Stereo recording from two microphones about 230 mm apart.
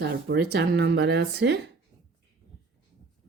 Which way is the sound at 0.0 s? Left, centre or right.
Right.